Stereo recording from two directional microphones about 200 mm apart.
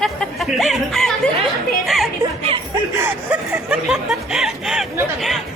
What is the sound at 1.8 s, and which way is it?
Music, centre (ahead or behind).